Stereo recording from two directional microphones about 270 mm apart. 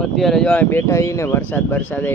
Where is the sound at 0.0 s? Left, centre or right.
Centre.